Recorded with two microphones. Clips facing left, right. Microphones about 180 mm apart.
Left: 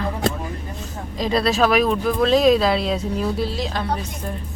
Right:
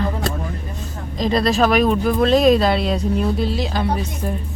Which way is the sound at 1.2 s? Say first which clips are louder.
Right 2 dB; 5° left (ahead or behind).